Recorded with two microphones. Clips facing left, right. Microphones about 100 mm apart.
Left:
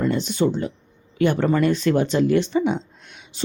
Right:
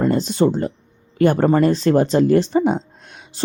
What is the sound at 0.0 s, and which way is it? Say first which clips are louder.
Speech: right 4 dB; 40° right (ahead or behind).